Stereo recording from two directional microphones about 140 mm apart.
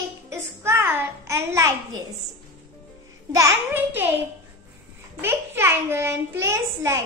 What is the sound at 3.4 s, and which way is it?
Speech, 20° right (ahead or behind).